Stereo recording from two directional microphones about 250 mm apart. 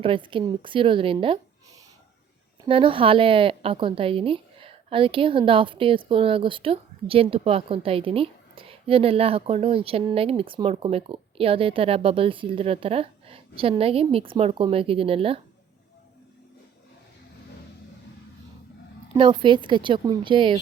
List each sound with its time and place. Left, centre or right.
0.0 s a woman's voice: right
2.6 s a woman's voice: right
19.1 s a woman's voice: centre